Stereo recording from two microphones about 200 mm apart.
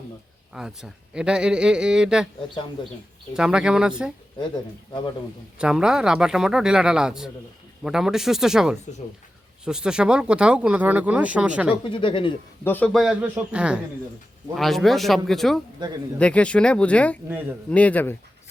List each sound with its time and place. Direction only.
0.5 s speech: 5° right (ahead or behind)
3.3 s speech: 5° right (ahead or behind)
5.5 s speech: 5° right (ahead or behind)
11.7 s speech: 25° left (ahead or behind)
12.6 s speech: 10° left (ahead or behind)